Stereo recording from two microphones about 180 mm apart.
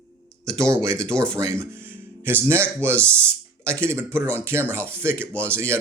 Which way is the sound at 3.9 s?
15° right (ahead or behind).